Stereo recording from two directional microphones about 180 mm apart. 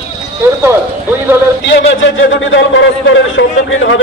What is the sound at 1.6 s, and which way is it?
A man's voice, 90° left.